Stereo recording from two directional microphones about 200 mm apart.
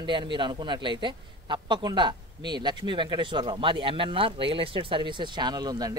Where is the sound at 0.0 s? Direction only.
25° right (ahead or behind).